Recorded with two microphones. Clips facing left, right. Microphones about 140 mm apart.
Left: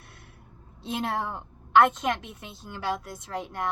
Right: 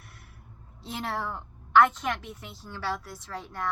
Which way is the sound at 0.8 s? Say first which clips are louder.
Left 3 dB; 20° left (ahead or behind).